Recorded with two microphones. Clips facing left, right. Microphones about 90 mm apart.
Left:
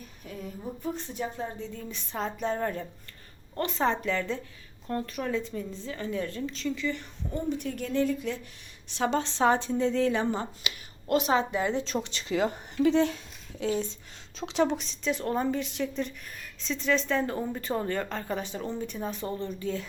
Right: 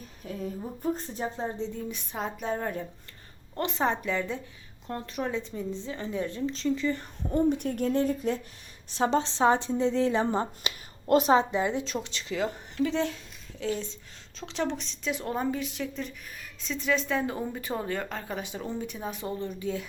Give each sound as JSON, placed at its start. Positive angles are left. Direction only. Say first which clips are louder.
{"t": 0.2, "sound": "a sound", "louder": "right 3 dB", "side_deg": -35}
{"t": 0.8, "sound": "speech", "louder": "right 3 dB", "side_deg": -40}
{"t": 1.8, "sound": "speech", "louder": "even", "side_deg": -10}
{"t": 3.5, "sound": "speech", "louder": "even", "side_deg": -20}
{"t": 7.2, "sound": "speech", "louder": "right 9 dB", "side_deg": -50}
{"t": 9.1, "sound": "speech", "louder": "right 1 dB", "side_deg": -20}
{"t": 11.5, "sound": "speech", "louder": "even", "side_deg": -15}
{"t": 11.9, "sound": "a woman's voice", "louder": "left 3 dB", "side_deg": 0}
{"t": 15.0, "sound": "a woman's voice", "louder": "left 1 dB", "side_deg": -5}